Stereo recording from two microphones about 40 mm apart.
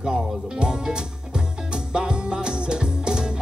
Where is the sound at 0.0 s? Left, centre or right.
Centre.